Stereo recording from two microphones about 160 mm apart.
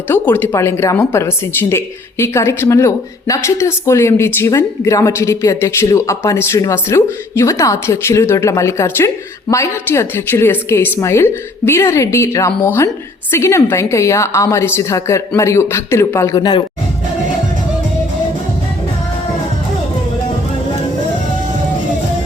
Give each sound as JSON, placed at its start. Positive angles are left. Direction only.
{"t": 0.1, "sound": "speech", "side_deg": 10}